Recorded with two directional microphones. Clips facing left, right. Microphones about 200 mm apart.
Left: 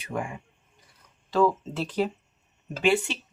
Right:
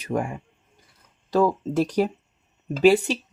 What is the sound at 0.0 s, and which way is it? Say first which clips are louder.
Speech: right 6 dB; 40° right (ahead or behind).